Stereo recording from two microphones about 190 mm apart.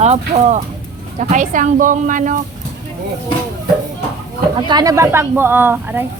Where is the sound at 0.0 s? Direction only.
35° right (ahead or behind).